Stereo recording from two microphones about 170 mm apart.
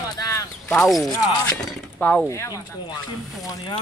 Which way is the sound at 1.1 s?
15° left (ahead or behind).